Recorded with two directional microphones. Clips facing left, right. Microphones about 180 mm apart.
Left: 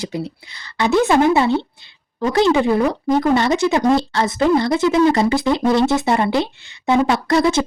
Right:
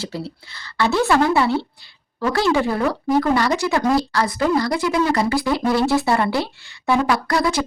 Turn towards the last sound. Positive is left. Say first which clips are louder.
# left 4 dB
turn(degrees=25)  # may be behind; listen again after turning